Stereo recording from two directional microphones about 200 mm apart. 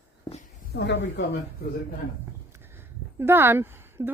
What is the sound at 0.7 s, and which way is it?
Speech, 60° left (ahead or behind).